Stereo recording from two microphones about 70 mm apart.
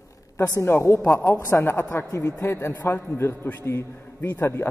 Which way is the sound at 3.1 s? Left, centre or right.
Left.